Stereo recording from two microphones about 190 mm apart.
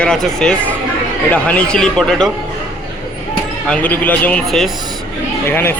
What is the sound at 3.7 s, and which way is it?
Speech, 10° left (ahead or behind).